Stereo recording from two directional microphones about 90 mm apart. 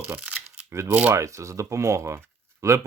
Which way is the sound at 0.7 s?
35° right (ahead or behind).